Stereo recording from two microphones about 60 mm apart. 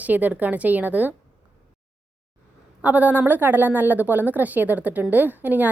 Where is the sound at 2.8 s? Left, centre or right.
Right.